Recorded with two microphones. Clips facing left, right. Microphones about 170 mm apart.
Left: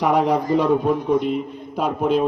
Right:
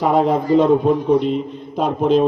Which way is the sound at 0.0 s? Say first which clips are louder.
Right 2 dB; 15° left (ahead or behind).